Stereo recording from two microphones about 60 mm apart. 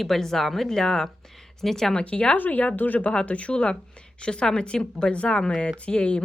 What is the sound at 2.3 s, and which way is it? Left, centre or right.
Speech, left.